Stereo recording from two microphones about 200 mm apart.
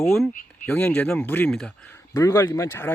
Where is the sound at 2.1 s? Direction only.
15° left (ahead or behind).